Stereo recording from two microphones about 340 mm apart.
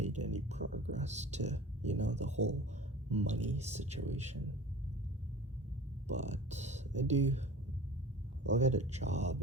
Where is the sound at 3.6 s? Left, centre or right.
Centre.